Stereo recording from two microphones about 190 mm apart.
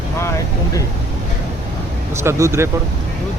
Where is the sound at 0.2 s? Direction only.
15° left (ahead or behind).